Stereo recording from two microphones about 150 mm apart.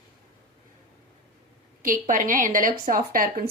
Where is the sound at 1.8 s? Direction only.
65° right (ahead or behind).